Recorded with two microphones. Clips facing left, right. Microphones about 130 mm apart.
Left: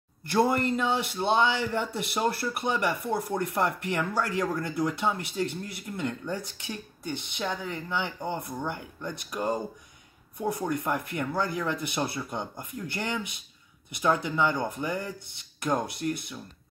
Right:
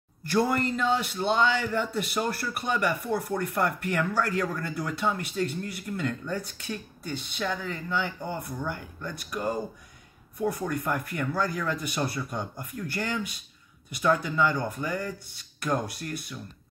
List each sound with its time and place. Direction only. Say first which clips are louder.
0.3 s a man's voice: left 1 dB; 20° left (ahead or behind)
10.6 s speech: even; 20° left (ahead or behind)